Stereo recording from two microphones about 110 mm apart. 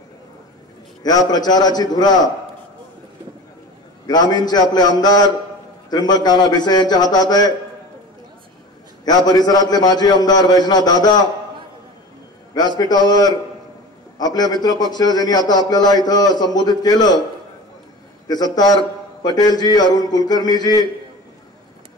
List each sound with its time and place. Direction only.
1.0 s a man's voice: 35° left (ahead or behind)
4.1 s a man's voice: 40° left (ahead or behind)
9.0 s a man's voice: 35° left (ahead or behind)
12.5 s a man's voice: 40° left (ahead or behind)
18.2 s a man's voice: 40° left (ahead or behind)